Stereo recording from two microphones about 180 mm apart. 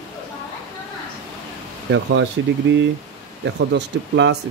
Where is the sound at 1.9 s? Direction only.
75° right (ahead or behind).